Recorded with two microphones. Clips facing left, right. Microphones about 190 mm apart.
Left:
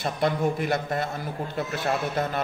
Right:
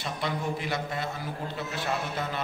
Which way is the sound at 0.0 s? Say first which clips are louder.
Left 7 dB; 50° left (ahead or behind).